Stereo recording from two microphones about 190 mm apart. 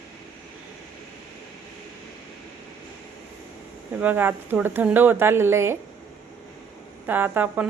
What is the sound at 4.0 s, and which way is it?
A woman's voice, 10° right (ahead or behind).